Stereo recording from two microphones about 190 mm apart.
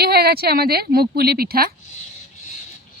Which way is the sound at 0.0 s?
55° right (ahead or behind).